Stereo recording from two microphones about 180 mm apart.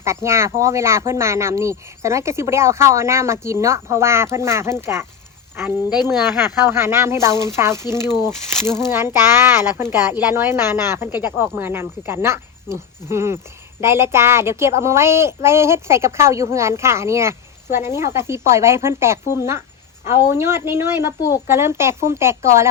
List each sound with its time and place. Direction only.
0.0 s speech: 15° right (ahead or behind)
21.2 s a woman's voice: 20° left (ahead or behind)
21.4 s speech: 15° right (ahead or behind)